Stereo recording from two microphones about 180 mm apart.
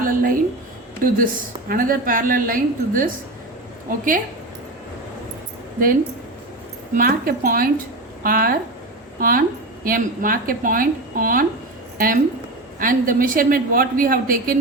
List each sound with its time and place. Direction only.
0.0 s a sound: 50° right (ahead or behind)
1.2 s a woman's voice: 50° right (ahead or behind)
6.9 s a woman's voice: 50° right (ahead or behind)